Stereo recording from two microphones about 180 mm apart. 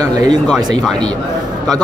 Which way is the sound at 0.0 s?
20° right (ahead or behind).